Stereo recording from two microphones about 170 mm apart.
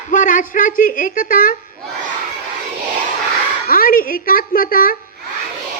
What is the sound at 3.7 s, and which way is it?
A woman's voice, 55° left (ahead or behind).